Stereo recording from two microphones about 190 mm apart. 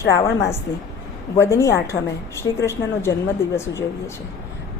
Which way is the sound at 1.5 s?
15° left (ahead or behind).